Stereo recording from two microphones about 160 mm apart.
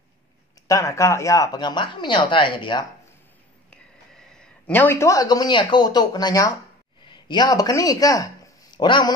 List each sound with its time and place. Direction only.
0.7 s speech: 20° left (ahead or behind)
3.7 s speech: 5° left (ahead or behind); by 9.1 s 30° left (ahead or behind)